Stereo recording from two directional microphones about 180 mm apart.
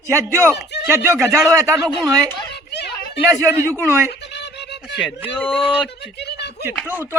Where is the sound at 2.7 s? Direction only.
65° left (ahead or behind).